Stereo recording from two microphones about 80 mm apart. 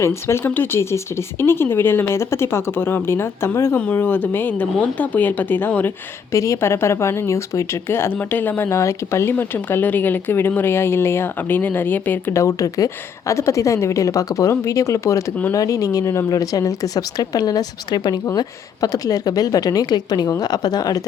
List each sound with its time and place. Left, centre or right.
0.0 s speech: left
6.3 s speech: left
12.3 s a woman's voice: left